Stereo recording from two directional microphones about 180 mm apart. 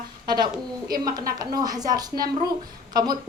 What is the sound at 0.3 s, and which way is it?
A man's voice, 25° right (ahead or behind).